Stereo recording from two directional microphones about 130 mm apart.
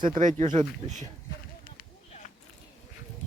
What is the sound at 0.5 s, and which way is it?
Speech, 65° right (ahead or behind).